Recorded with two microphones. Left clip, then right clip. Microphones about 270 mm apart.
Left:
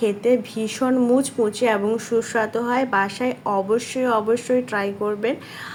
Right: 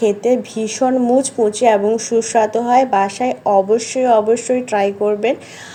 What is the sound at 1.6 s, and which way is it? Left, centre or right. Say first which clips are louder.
A woman's voice: right 9 dB; centre.